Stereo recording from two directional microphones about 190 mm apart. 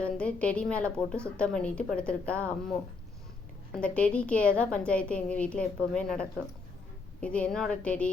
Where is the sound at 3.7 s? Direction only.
5° left (ahead or behind).